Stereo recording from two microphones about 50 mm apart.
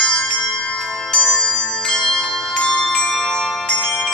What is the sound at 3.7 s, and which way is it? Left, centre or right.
Ringtone, centre.